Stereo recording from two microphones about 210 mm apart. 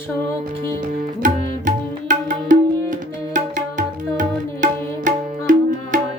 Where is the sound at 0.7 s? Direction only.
40° right (ahead or behind).